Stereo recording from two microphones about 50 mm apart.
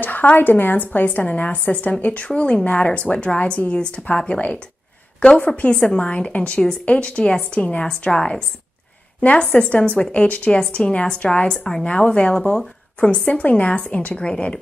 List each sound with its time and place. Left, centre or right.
0.0 s a sound: left
0.4 s a woman's voice: left
5.6 s a woman's voice: centre
9.2 s a woman's voice: left
11.5 s speech: centre
11.8 s a woman's voice: left